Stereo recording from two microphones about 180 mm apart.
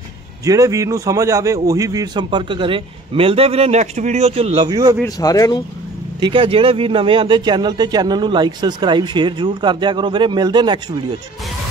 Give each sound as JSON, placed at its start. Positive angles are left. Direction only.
{"t": 0.5, "sound": "a man's voice", "side_deg": -20}
{"t": 5.0, "sound": "speech", "side_deg": 20}
{"t": 6.2, "sound": "a man's voice", "side_deg": -30}